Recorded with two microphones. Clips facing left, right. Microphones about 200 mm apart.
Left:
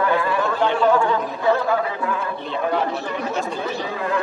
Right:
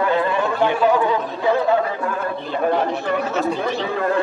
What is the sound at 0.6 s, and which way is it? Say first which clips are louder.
Speech: right 1 dB; 15° right (ahead or behind).